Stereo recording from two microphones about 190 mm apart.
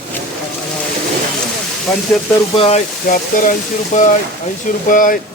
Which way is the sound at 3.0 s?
45° left (ahead or behind).